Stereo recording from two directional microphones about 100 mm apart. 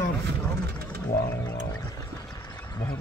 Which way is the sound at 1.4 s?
35° left (ahead or behind).